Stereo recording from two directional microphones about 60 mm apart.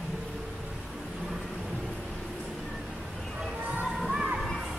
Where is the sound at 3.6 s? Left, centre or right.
Right.